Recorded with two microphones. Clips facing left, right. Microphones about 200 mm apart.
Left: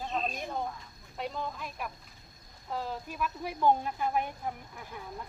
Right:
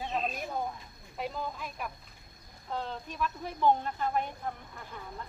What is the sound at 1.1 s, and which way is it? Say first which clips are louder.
Speech: even; centre (ahead or behind).